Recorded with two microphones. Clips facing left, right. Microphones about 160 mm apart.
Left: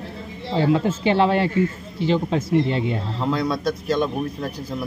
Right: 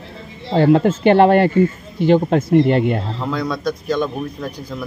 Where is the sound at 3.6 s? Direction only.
30° left (ahead or behind).